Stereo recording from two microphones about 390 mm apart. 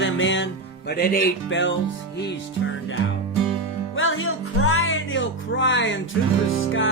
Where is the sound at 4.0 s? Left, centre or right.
Left.